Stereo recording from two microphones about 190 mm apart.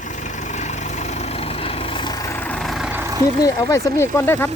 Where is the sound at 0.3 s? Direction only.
40° left (ahead or behind); by 3.2 s 15° right (ahead or behind).